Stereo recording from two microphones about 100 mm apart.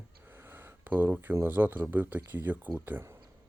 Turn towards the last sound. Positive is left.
turn(degrees=-20)  # may be behind; listen again after turning